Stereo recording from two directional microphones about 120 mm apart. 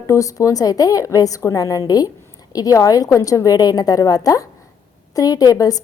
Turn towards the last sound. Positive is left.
turn(degrees=30)  # may be behind; listen again after turning